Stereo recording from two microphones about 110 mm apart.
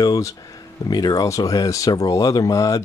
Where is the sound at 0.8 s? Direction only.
35° left (ahead or behind).